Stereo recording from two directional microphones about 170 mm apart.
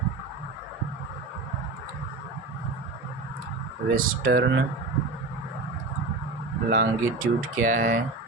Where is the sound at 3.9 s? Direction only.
55° right (ahead or behind).